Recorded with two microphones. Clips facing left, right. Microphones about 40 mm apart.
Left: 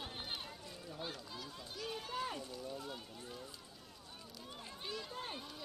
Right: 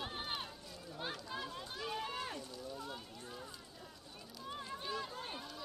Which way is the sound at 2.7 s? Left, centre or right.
Centre.